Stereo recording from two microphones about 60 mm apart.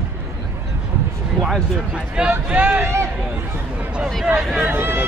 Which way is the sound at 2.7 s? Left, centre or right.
Right.